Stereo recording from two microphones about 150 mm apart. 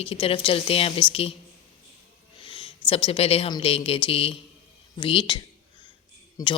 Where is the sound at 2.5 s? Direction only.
35° left (ahead or behind).